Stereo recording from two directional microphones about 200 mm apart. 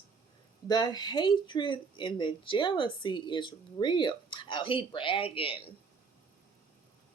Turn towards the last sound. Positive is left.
turn(degrees=25)  # may be behind; listen again after turning